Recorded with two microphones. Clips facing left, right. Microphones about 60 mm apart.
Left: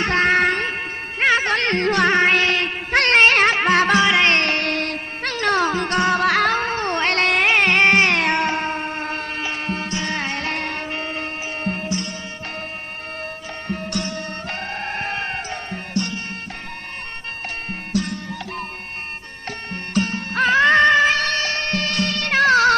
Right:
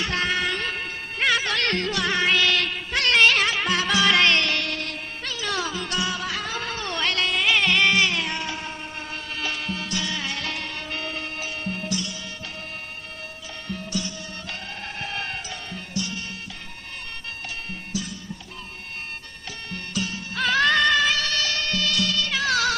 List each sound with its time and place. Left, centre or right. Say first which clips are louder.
0.0 s music: left 8 dB; left
4.0 s music: left 3 dB; left
4.3 s music: left 4 dB; left
6.7 s music: left 6 dB; left
9.4 s music: left 4 dB; left
10.9 s music: left 4 dB; left
13.9 s music: left 5 dB; left
17.7 s music: left 10 dB; left
19.5 s music: left 5 dB; left